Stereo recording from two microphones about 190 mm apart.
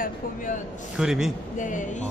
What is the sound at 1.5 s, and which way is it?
Speech, 40° left (ahead or behind).